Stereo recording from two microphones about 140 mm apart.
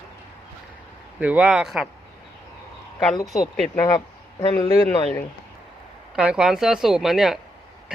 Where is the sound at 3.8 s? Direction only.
25° left (ahead or behind).